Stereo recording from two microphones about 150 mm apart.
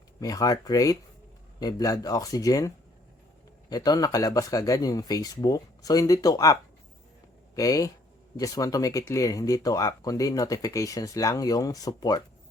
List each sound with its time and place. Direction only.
0.2 s speech: 25° left (ahead or behind)